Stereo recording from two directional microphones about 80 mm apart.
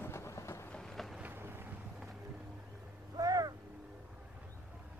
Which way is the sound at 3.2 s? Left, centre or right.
Right.